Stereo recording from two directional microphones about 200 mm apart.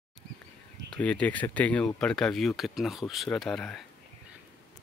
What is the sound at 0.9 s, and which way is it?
Speech, 5° left (ahead or behind).